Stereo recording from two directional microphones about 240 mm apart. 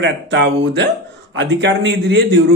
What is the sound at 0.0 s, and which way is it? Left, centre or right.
Speech, right.